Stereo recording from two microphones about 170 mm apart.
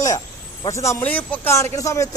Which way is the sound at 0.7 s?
15° left (ahead or behind).